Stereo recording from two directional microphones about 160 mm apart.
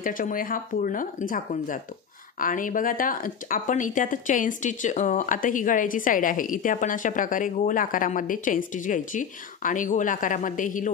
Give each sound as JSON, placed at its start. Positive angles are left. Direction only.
{"t": 0.0, "sound": "speech", "side_deg": 60}